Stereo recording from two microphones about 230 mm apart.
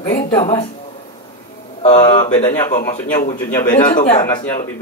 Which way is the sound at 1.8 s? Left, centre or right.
Left.